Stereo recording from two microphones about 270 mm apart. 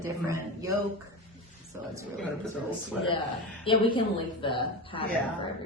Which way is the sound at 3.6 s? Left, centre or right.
Centre.